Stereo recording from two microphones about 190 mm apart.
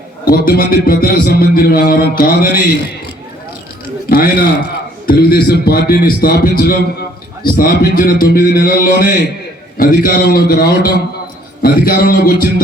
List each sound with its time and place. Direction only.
0.3 s a man's voice: 50° left (ahead or behind)
4.1 s a man's voice: 50° left (ahead or behind)